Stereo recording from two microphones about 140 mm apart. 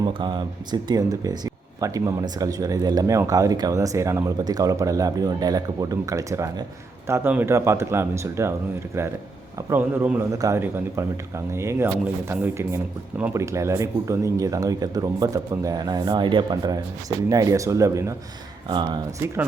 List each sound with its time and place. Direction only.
0.0 s speech: 35° right (ahead or behind)
9.6 s speech: 15° right (ahead or behind)
18.7 s speech: 35° right (ahead or behind)